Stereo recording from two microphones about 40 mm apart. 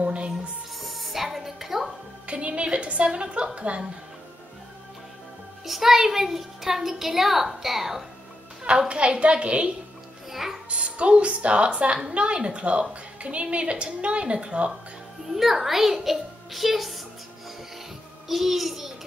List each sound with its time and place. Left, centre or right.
0.0 s music: right
0.7 s music: centre
2.2 s speech: right
5.7 s a child's voice: centre
8.6 s speech: right
10.7 s speech: right
15.3 s a child's voice: centre
18.3 s a child's voice: centre